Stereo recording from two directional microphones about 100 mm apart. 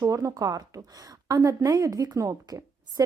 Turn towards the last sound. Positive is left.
turn(degrees=-35)  # may be behind; listen again after turning